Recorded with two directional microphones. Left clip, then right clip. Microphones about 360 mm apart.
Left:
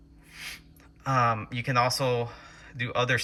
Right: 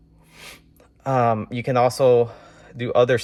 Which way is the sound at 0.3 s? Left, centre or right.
Centre.